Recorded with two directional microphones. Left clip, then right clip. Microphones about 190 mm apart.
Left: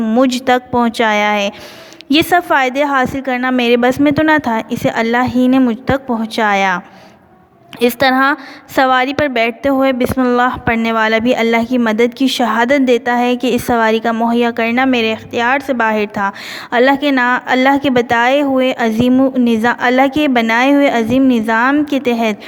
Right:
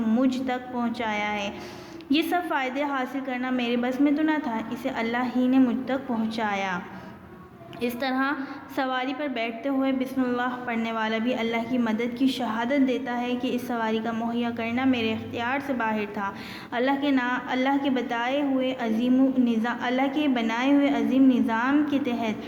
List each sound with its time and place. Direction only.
0.0 s a woman's voice: 45° left (ahead or behind)